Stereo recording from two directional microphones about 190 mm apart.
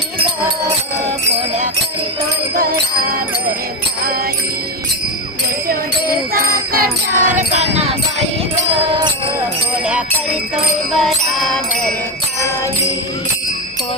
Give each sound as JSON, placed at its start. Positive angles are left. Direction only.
{"t": 2.6, "sound": "music", "side_deg": -50}
{"t": 6.7, "sound": "jingle bell", "side_deg": -45}
{"t": 8.7, "sound": "music", "side_deg": -25}
{"t": 10.9, "sound": "music", "side_deg": 0}